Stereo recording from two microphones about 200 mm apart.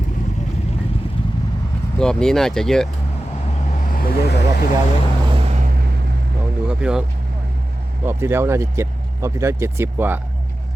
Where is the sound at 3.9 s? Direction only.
50° left (ahead or behind).